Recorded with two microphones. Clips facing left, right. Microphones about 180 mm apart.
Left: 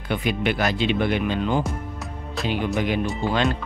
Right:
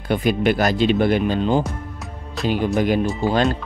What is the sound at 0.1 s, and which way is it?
Speech, 40° right (ahead or behind).